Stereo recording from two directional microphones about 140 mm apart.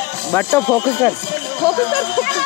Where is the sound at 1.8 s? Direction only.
35° left (ahead or behind).